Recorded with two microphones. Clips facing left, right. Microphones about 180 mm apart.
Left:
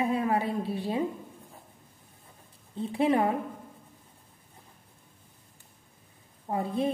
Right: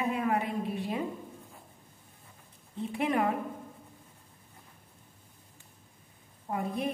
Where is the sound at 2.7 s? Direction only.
30° left (ahead or behind).